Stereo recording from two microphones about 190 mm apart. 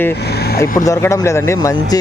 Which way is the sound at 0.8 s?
15° left (ahead or behind).